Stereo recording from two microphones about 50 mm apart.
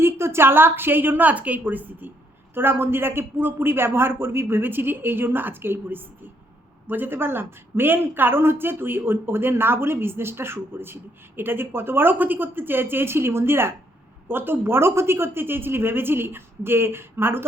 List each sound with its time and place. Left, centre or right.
0.0 s speech: right